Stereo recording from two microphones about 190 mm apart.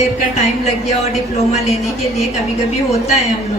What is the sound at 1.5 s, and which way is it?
Speech, 35° left (ahead or behind).